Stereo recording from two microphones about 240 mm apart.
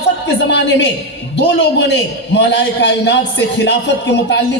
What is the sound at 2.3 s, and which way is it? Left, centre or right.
A man's voice, left.